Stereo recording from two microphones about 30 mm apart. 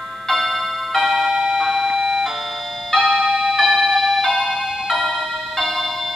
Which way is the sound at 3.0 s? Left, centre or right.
Centre.